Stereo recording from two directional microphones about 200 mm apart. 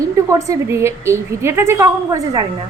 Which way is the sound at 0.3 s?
15° right (ahead or behind).